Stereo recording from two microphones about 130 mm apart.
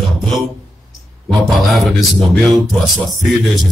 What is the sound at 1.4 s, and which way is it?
Music, centre (ahead or behind).